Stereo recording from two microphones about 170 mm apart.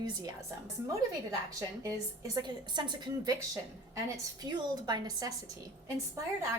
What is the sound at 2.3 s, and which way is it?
A woman's voice, 25° right (ahead or behind).